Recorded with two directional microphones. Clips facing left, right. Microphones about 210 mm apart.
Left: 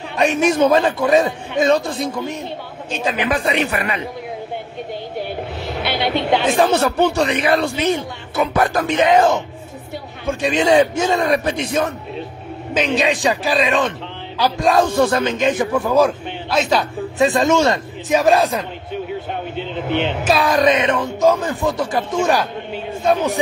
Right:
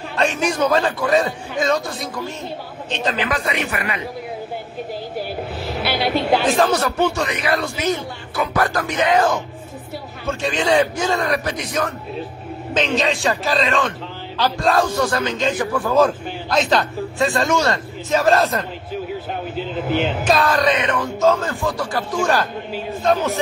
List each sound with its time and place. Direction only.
0.1 s speech: 20° left (ahead or behind)
2.9 s a man's voice: 10° left (ahead or behind)
3.3 s speech: 30° left (ahead or behind)
5.1 s speech: centre (ahead or behind)
6.7 s speech: 30° left (ahead or behind)
12.9 s a man's voice: 15° left (ahead or behind)
16.0 s a man's voice: 10° left (ahead or behind)
17.2 s a man's voice: 20° left (ahead or behind)
19.5 s speech: centre (ahead or behind)
20.3 s a man's voice: 15° left (ahead or behind)